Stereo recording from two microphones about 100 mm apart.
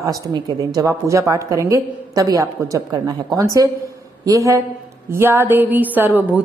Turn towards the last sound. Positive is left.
turn(degrees=-20)  # may be behind; listen again after turning